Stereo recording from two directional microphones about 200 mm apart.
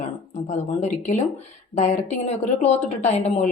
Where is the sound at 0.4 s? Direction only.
35° left (ahead or behind).